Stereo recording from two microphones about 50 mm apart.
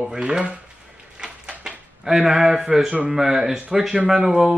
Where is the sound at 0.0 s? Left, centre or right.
Centre.